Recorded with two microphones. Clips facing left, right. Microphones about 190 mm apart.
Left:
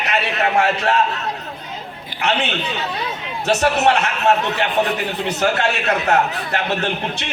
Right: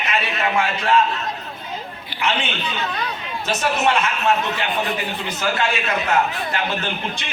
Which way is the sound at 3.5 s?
70° left (ahead or behind).